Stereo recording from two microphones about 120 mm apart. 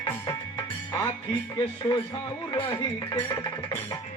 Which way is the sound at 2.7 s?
25° left (ahead or behind).